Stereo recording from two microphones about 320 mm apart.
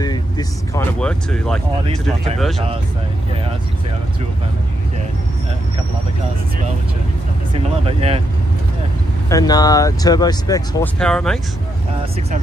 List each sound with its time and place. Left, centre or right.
0.0 s speech: centre
7.5 s speech: centre
9.3 s speech: centre